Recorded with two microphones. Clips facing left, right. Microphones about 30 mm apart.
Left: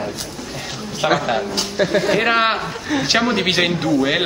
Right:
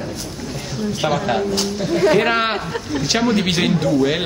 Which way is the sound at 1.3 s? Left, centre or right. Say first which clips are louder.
Right 2 dB; centre.